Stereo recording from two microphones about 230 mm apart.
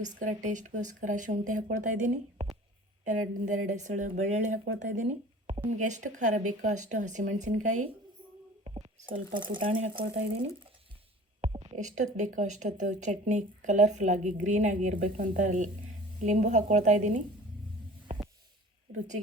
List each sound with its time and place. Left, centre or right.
0.0 s speech: right
8.6 s whispering: right
9.0 s speech: right
11.3 s a sound: right
11.8 s speech: right
18.9 s a woman's voice: right